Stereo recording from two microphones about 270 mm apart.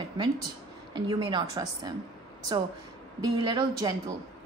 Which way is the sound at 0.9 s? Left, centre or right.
Centre.